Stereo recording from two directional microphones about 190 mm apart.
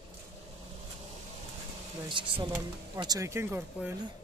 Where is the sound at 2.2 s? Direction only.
25° right (ahead or behind).